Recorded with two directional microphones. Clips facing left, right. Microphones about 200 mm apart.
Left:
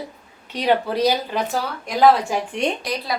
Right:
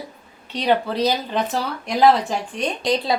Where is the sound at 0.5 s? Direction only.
10° left (ahead or behind).